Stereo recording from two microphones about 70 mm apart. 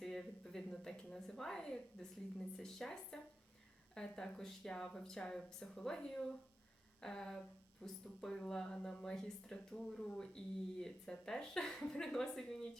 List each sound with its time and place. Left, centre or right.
0.0 s speech: centre